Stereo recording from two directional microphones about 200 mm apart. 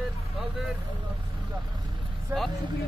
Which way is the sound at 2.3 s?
15° right (ahead or behind).